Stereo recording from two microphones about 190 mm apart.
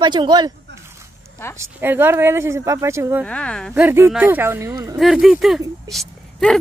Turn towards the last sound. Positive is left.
turn(degrees=0)  # may be behind; listen again after turning